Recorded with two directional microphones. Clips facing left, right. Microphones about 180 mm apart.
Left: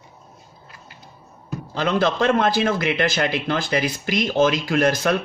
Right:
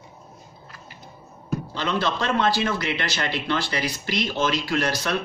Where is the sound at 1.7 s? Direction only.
50° left (ahead or behind).